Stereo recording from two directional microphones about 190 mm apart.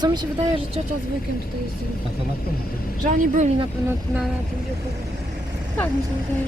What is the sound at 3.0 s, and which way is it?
Speech, 40° right (ahead or behind).